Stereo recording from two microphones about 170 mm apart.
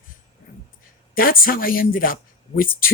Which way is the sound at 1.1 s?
60° left (ahead or behind).